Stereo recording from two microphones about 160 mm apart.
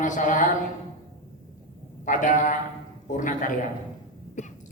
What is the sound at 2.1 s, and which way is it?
A man's voice, 55° left (ahead or behind).